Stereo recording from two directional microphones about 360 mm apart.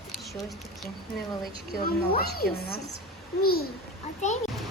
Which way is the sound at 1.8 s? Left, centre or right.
Left.